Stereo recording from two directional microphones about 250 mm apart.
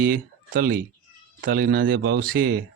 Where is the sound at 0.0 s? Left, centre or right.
Right.